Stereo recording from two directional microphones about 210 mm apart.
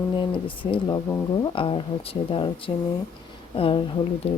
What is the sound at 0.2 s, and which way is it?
Speech, 25° left (ahead or behind).